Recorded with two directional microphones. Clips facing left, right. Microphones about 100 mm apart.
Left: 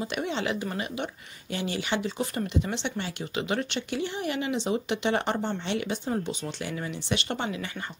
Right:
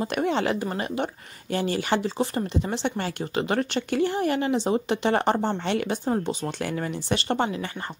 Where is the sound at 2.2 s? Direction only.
30° right (ahead or behind).